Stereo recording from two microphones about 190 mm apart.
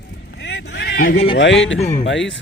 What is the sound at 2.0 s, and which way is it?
Speech, 75° left (ahead or behind).